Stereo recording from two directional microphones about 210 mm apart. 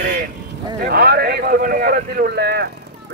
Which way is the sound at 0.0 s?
40° right (ahead or behind).